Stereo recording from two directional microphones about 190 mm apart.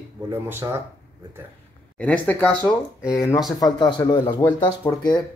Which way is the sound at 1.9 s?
5° left (ahead or behind).